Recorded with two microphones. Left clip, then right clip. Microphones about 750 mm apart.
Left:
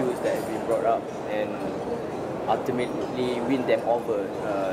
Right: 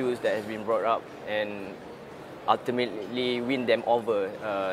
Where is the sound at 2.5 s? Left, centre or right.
Right.